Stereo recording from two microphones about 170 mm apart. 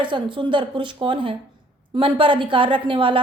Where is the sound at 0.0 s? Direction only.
30° right (ahead or behind).